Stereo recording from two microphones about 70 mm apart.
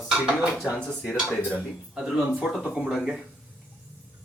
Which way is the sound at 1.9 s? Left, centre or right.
Centre.